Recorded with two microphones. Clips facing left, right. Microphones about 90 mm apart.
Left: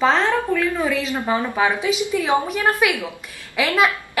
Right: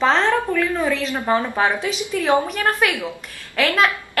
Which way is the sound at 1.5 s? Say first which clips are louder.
Left 1 dB; 5° left (ahead or behind).